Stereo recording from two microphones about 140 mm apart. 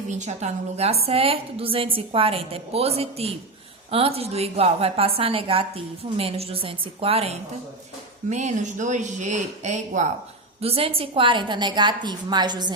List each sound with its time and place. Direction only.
0.2 s a woman's voice: 55° right (ahead or behind)
8.3 s speech: 55° right (ahead or behind)
10.6 s a woman's voice: 45° right (ahead or behind)